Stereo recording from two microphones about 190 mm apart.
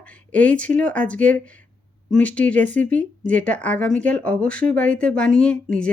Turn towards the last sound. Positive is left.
turn(degrees=5)  # may be behind; listen again after turning